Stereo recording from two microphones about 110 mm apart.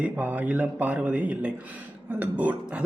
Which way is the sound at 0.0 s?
15° right (ahead or behind).